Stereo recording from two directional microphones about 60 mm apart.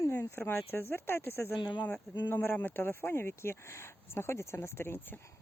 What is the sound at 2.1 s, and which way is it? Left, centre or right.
Speech, left.